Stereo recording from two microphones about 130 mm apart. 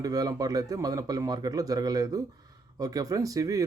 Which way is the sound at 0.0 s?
30° right (ahead or behind).